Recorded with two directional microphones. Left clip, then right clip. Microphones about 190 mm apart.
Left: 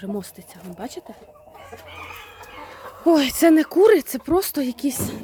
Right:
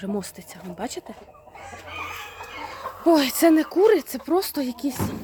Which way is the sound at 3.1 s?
20° left (ahead or behind).